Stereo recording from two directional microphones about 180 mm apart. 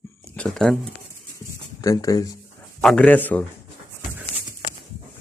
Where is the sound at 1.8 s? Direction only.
20° left (ahead or behind).